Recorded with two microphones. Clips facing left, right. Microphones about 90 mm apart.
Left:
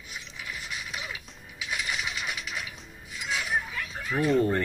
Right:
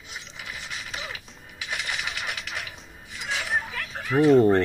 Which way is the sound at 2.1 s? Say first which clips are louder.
Right 1 dB; 60° right (ahead or behind).